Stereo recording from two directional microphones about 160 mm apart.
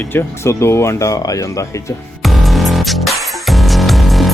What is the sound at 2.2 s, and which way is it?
Music, centre (ahead or behind).